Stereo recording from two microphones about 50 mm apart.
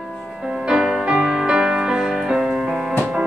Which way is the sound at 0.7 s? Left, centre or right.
Centre.